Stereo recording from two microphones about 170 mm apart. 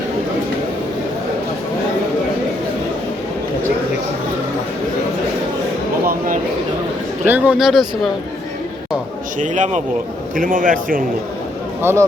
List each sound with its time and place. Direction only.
6.1 s a man's voice: 50° right (ahead or behind)
7.3 s speech: 10° right (ahead or behind)
9.4 s a man's voice: 45° right (ahead or behind)
11.8 s speech: 15° right (ahead or behind)